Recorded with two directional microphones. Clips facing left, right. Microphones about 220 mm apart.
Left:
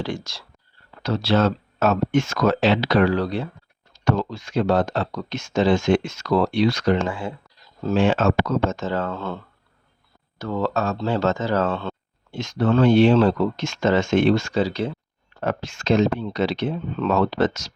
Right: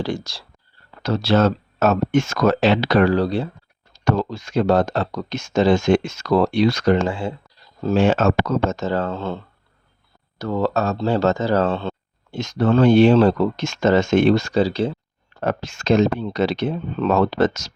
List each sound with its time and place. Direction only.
0.0 s speech: 35° right (ahead or behind)
1.0 s speech: 45° right (ahead or behind)
3.2 s speech: 30° right (ahead or behind)
7.1 s speech: 30° right (ahead or behind)
7.9 s speech: 40° right (ahead or behind); by 9.4 s 25° right (ahead or behind)
10.3 s speech: 40° right (ahead or behind)
12.4 s speech: 40° right (ahead or behind)
15.4 s speech: 40° right (ahead or behind)